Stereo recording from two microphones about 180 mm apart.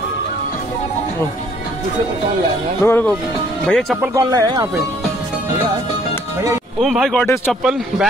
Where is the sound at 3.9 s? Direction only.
10° right (ahead or behind).